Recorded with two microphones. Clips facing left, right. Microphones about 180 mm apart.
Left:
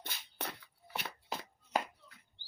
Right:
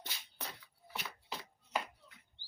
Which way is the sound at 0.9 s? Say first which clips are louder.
Left 3 dB; 50° left (ahead or behind).